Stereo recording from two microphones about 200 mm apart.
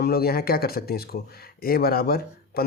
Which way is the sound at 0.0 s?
50° left (ahead or behind).